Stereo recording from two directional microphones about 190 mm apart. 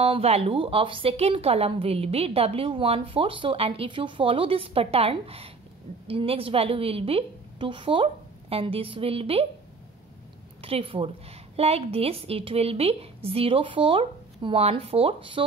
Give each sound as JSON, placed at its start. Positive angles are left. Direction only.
{"t": 0.0, "sound": "speech", "side_deg": -30}
{"t": 10.6, "sound": "a woman's voice", "side_deg": -30}